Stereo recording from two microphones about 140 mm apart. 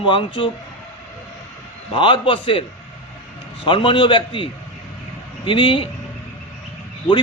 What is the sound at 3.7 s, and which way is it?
A man's voice, 35° left (ahead or behind).